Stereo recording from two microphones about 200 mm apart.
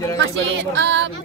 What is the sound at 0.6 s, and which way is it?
Speech, 60° right (ahead or behind).